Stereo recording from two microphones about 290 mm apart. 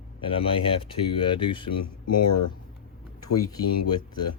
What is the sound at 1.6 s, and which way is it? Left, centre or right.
Speech, left.